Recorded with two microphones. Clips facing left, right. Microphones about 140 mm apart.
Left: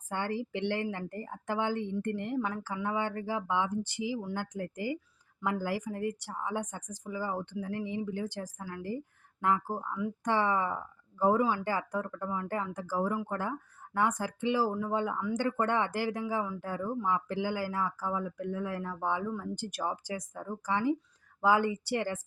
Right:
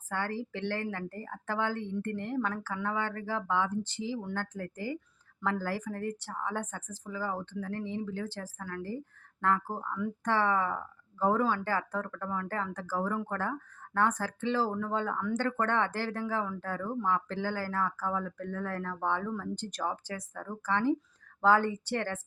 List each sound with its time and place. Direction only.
0.1 s speech: 15° left (ahead or behind)